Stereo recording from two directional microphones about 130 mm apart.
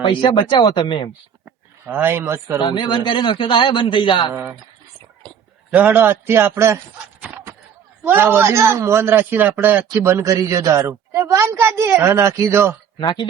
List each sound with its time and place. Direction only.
0.0 s a man's voice: 40° left (ahead or behind)
1.9 s a man's voice: 15° right (ahead or behind)
2.6 s a man's voice: 40° left (ahead or behind)
5.7 s a man's voice: 15° right (ahead or behind)
8.0 s a man's voice: 15° right (ahead or behind)
13.0 s a man's voice: 35° left (ahead or behind)